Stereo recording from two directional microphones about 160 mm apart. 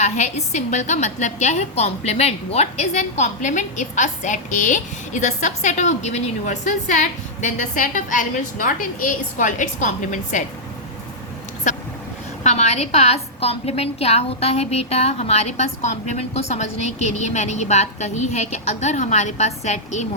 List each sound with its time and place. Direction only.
0.0 s a woman's voice: 45° left (ahead or behind)
11.7 s a woman's voice: 50° left (ahead or behind)